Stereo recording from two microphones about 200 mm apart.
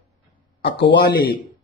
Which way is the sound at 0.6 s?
60° left (ahead or behind).